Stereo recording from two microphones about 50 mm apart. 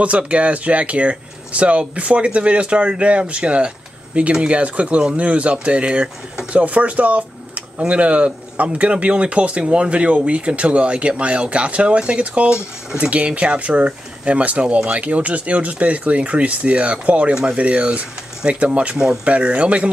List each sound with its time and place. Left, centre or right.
0.0 s speech: right